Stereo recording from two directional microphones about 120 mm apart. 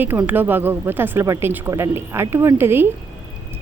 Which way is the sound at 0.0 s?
15° right (ahead or behind).